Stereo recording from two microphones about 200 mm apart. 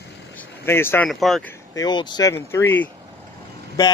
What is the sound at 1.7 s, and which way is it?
Speech, 20° left (ahead or behind).